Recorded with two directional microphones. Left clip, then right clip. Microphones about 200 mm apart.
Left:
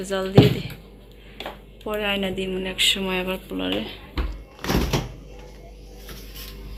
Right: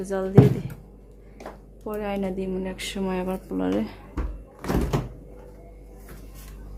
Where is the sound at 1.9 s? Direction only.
5° right (ahead or behind).